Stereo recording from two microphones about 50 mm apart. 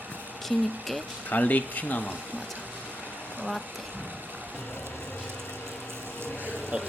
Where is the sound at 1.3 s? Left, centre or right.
Left.